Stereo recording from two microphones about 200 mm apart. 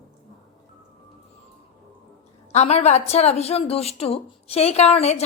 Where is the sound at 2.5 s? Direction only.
35° left (ahead or behind).